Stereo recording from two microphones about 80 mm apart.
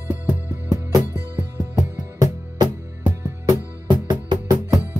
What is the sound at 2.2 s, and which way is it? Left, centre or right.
Music, right.